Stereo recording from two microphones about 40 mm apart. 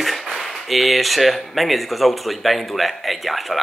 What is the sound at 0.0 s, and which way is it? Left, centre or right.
Speech, centre.